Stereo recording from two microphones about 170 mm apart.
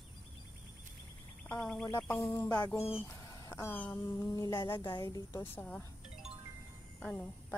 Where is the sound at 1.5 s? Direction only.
5° left (ahead or behind).